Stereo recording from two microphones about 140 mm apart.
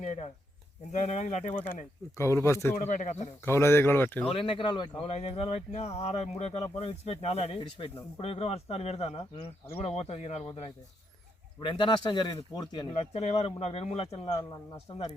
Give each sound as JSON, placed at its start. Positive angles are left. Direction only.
{"t": 0.0, "sound": "speech", "side_deg": 60}
{"t": 1.6, "sound": "speech", "side_deg": 15}
{"t": 2.7, "sound": "speech", "side_deg": 70}
{"t": 3.4, "sound": "speech", "side_deg": 20}
{"t": 4.3, "sound": "speech", "side_deg": 40}
{"t": 12.9, "sound": "speech", "side_deg": 50}